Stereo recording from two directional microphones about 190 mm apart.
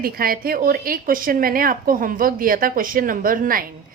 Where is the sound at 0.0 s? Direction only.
50° right (ahead or behind).